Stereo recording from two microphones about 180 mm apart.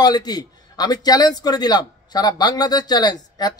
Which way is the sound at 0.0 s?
20° left (ahead or behind).